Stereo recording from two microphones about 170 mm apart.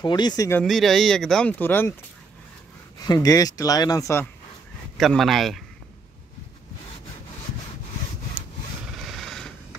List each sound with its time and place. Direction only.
0.0 s speech: 25° left (ahead or behind)
0.7 s speech: centre (ahead or behind)
3.1 s speech: 20° left (ahead or behind)
4.9 s speech: centre (ahead or behind)
8.9 s a sound: centre (ahead or behind)